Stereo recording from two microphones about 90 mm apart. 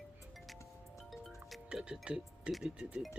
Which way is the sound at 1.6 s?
10° right (ahead or behind).